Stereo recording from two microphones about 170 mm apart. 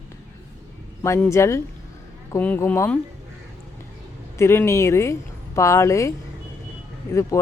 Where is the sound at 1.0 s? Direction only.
15° left (ahead or behind).